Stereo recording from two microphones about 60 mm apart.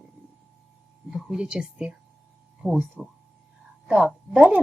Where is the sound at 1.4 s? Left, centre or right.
Centre.